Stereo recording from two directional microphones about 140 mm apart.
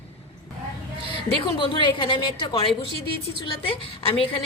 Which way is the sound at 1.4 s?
35° left (ahead or behind).